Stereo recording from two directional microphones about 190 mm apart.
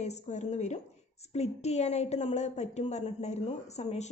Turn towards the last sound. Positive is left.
turn(degrees=35)  # may be behind; listen again after turning